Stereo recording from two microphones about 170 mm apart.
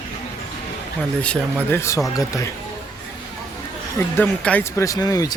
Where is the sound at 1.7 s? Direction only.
15° left (ahead or behind).